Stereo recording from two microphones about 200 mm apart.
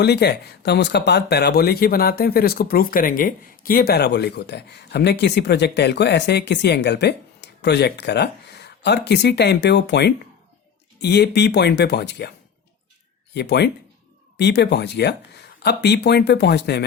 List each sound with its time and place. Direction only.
0.0 s speech: 55° left (ahead or behind)
13.3 s speech: 60° left (ahead or behind)